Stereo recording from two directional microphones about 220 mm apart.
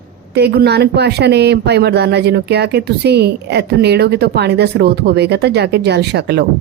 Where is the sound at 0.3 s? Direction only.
50° right (ahead or behind).